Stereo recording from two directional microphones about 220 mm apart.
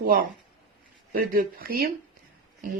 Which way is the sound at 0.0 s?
40° right (ahead or behind).